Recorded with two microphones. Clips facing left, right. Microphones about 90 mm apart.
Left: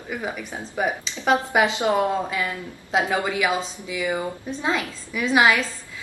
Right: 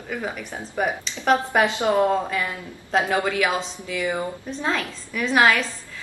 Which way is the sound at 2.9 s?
5° left (ahead or behind).